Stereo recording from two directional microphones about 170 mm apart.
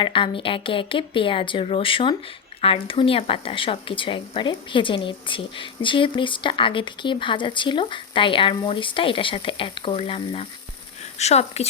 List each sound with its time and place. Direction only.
0.0 s speech: 30° left (ahead or behind)